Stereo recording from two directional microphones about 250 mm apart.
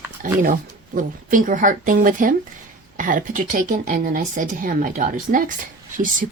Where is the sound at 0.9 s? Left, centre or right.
Right.